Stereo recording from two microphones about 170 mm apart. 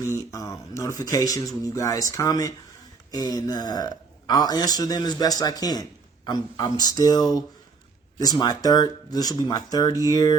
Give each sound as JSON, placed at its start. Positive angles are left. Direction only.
{"t": 0.2, "sound": "a man's voice", "side_deg": 20}